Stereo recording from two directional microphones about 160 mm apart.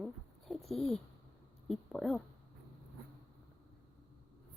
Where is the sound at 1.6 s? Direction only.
Centre (ahead or behind).